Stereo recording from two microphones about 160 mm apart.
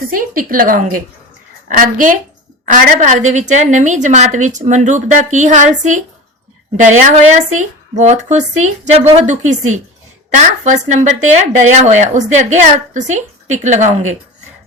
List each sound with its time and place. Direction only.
0.1 s a woman's voice: 60° right (ahead or behind)